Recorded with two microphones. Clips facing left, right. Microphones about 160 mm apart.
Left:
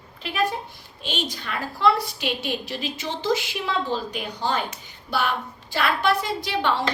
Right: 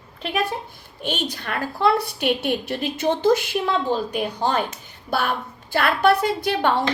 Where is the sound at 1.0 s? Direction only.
55° right (ahead or behind).